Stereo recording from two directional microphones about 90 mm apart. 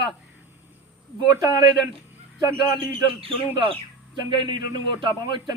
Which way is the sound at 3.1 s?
90° right.